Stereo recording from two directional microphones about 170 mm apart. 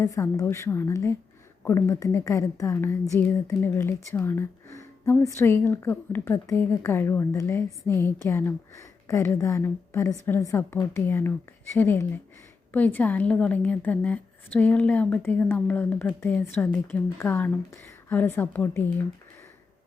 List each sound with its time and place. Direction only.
0.0 s a woman's voice: 20° left (ahead or behind)